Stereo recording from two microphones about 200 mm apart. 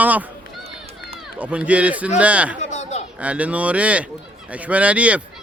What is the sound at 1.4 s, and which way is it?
Speech, 5° right (ahead or behind).